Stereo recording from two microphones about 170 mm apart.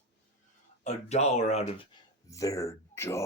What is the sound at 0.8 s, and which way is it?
Speech, 40° left (ahead or behind).